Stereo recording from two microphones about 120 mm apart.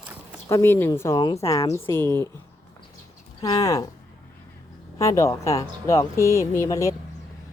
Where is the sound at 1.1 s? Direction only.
35° left (ahead or behind).